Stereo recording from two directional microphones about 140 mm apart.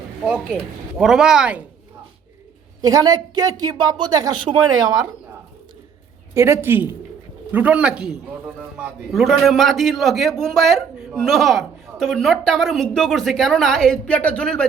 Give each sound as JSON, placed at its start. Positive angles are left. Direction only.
{"t": 0.9, "sound": "a man's voice", "side_deg": -5}
{"t": 2.8, "sound": "speech", "side_deg": -25}
{"t": 6.3, "sound": "a man's voice", "side_deg": -20}